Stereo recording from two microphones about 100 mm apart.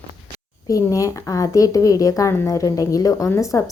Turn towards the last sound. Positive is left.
turn(degrees=30)  # may be behind; listen again after turning